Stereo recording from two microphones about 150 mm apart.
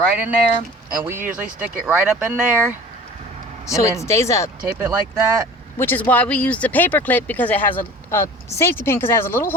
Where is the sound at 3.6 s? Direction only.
20° left (ahead or behind).